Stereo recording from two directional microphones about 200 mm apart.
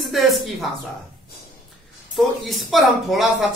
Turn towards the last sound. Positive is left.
turn(degrees=0)  # may be behind; listen again after turning